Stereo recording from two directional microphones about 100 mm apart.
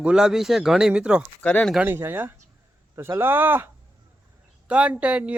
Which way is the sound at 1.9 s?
20° right (ahead or behind).